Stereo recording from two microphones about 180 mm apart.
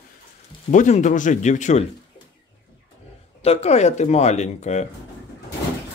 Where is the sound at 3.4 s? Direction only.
35° left (ahead or behind).